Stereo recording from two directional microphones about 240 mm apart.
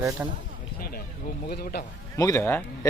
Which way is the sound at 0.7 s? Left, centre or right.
Left.